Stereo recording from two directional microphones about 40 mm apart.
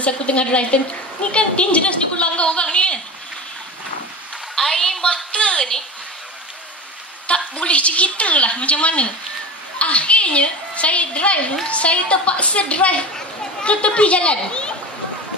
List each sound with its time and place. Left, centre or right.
0.0 s a woman's voice: left
4.6 s a woman's voice: centre
5.1 s a woman's voice: left
7.3 s a sound: left
7.6 s a woman's voice: left